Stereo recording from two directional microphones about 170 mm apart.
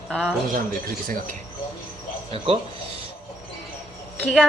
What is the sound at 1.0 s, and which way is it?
Speech, 55° right (ahead or behind).